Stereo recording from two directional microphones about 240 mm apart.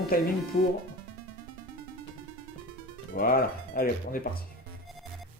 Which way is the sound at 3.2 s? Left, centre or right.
Left.